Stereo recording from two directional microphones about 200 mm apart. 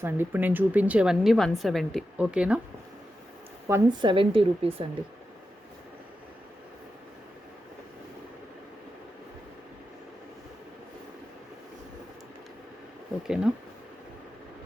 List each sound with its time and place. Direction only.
0.0 s a woman's voice: 10° right (ahead or behind)
3.7 s a woman's voice: 20° right (ahead or behind)
13.2 s a woman's voice: 5° right (ahead or behind)